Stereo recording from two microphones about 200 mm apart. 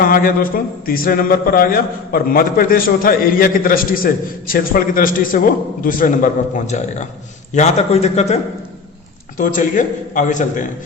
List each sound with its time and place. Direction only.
0.0 s a man's voice: 45° left (ahead or behind)
9.4 s a man's voice: 40° left (ahead or behind)